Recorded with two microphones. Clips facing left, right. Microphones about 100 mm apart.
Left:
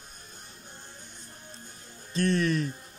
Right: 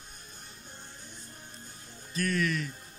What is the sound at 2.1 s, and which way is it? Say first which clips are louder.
Speech: left 4 dB; 30° left (ahead or behind).